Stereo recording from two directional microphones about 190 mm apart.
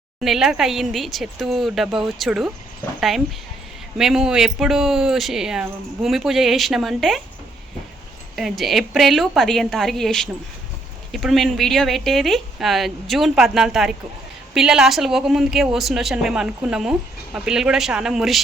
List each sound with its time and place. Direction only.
0.2 s speech: centre (ahead or behind)
3.9 s speech: 5° right (ahead or behind)
8.4 s speech: centre (ahead or behind)